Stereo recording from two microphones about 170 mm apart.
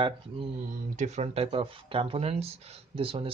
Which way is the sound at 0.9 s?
40° right (ahead or behind).